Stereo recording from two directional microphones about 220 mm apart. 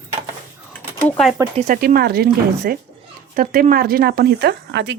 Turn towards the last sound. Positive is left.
turn(degrees=-50)  # may be behind; listen again after turning